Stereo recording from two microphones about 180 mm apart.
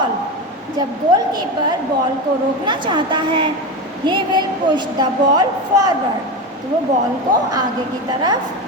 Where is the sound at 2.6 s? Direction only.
25° right (ahead or behind).